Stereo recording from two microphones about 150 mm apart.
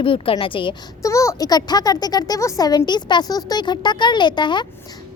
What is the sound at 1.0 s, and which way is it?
Speech, 20° left (ahead or behind).